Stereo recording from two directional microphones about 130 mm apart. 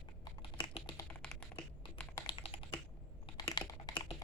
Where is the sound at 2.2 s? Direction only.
40° left (ahead or behind).